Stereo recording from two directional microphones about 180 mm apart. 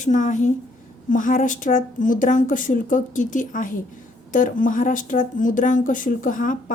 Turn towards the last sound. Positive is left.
turn(degrees=45)  # may be behind; listen again after turning